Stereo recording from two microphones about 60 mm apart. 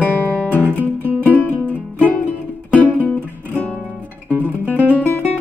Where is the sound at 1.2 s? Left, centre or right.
Left.